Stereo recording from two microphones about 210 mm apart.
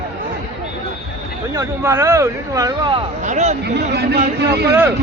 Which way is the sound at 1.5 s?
15° right (ahead or behind).